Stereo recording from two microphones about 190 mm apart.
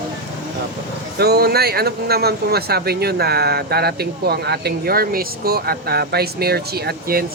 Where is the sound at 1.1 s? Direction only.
55° right (ahead or behind).